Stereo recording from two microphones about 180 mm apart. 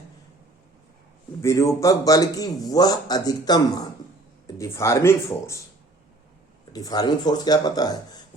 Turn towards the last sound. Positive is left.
turn(degrees=20)  # may be behind; listen again after turning